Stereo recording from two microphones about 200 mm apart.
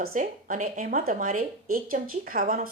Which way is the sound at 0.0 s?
40° right (ahead or behind).